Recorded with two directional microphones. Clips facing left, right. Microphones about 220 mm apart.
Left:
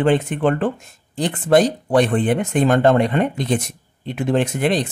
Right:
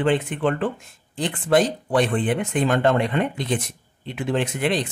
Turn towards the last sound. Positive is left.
turn(degrees=40)  # may be behind; listen again after turning